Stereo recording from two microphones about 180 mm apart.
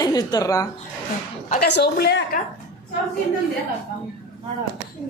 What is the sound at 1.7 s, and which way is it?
Speech, 65° left (ahead or behind).